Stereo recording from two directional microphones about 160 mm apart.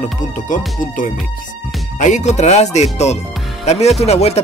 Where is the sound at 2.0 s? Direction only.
50° left (ahead or behind).